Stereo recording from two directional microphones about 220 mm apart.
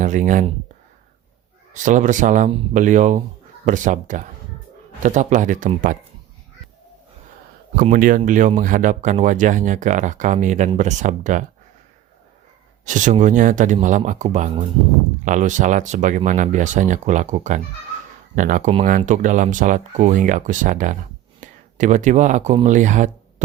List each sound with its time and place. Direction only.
0.0 s speech: 35° right (ahead or behind)
1.7 s speech: 35° right (ahead or behind)
7.8 s speech: 40° right (ahead or behind)
12.8 s speech: 35° right (ahead or behind)